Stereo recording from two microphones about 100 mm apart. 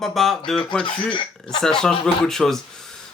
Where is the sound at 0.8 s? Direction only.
55° left (ahead or behind).